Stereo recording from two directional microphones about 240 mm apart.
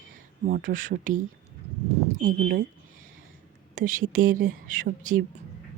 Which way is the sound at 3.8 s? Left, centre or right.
Right.